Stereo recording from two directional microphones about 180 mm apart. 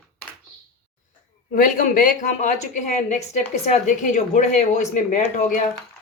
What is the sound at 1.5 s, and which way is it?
A woman's voice, 45° left (ahead or behind).